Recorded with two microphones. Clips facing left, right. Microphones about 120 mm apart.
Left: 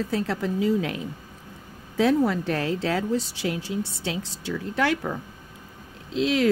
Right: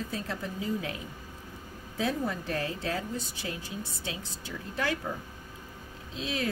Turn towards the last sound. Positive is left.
turn(degrees=85)